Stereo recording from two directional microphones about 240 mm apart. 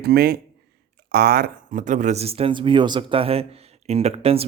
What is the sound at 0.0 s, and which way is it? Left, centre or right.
Speech, right.